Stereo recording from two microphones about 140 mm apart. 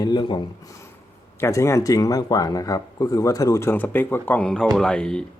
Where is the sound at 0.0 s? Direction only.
30° left (ahead or behind).